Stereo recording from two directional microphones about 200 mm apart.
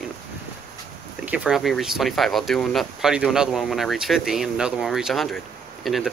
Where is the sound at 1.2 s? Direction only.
5° right (ahead or behind).